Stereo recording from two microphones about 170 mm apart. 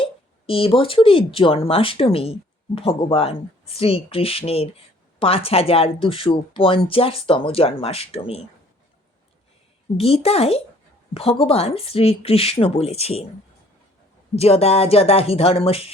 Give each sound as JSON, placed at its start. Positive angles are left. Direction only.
{"t": 0.0, "sound": "speech", "side_deg": 35}
{"t": 10.0, "sound": "speech", "side_deg": 35}
{"t": 14.3, "sound": "speech", "side_deg": 35}